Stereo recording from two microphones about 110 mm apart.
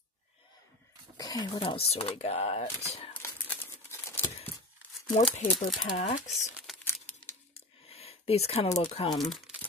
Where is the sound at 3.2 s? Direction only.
20° left (ahead or behind).